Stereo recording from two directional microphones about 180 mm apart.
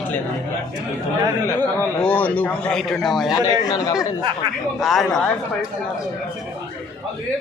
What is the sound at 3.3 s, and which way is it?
Speech, 20° left (ahead or behind).